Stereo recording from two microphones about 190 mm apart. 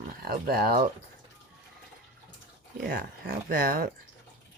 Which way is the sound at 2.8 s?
50° right (ahead or behind).